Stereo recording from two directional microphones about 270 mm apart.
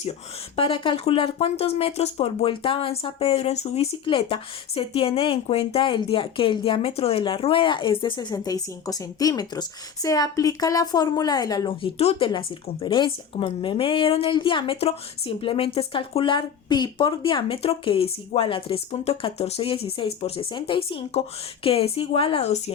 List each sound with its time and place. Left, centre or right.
0.5 s speech: centre